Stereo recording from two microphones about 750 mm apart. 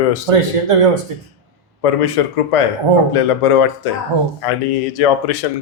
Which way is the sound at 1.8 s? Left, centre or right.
Left.